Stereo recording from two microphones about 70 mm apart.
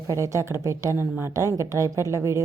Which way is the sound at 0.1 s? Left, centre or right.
Right.